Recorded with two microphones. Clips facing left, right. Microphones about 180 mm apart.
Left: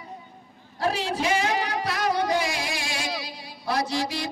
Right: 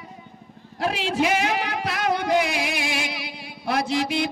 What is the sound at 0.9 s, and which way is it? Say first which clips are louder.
Music: right 5 dB; 70° right (ahead or behind).